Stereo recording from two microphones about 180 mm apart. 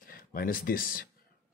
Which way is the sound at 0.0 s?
55° left (ahead or behind).